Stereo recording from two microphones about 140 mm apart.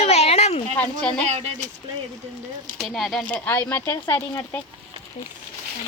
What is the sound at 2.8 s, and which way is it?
Speech, centre (ahead or behind).